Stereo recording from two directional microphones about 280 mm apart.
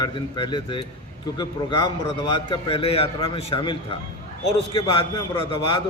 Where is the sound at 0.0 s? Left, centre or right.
Centre.